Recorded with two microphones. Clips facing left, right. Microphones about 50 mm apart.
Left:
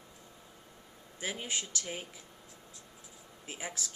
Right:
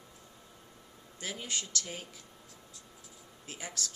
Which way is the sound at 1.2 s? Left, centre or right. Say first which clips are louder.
Left 2 dB; left.